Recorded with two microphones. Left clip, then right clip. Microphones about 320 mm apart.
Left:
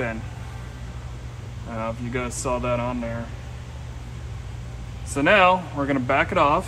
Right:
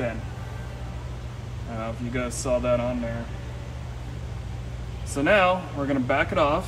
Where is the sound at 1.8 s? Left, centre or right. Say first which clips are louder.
Left 2 dB; centre.